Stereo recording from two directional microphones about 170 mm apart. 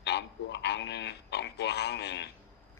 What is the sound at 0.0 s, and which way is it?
Speech, 85° left.